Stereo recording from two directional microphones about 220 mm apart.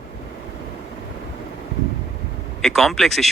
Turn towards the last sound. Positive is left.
turn(degrees=0)  # may be behind; listen again after turning